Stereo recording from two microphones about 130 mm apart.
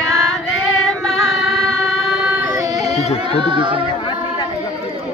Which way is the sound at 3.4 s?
40° right (ahead or behind).